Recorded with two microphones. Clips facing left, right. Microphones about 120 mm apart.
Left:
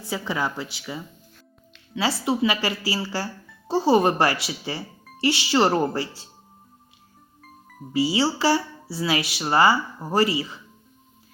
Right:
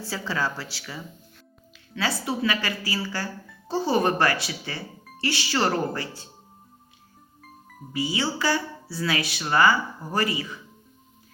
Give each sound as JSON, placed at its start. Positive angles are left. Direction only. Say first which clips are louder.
{"t": 0.0, "sound": "a woman's voice", "louder": "left 2 dB", "side_deg": 20}
{"t": 2.2, "sound": "a woman's voice", "louder": "left 5 dB", "side_deg": 25}
{"t": 7.4, "sound": "music", "louder": "left 2 dB", "side_deg": 0}
{"t": 7.9, "sound": "a woman's voice", "louder": "left 5 dB", "side_deg": 30}